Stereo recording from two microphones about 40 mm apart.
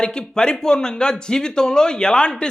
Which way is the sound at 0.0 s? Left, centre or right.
Left.